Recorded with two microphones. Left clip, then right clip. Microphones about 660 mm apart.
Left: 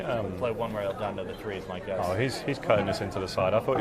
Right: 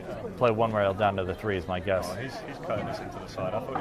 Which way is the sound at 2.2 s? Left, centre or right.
Left.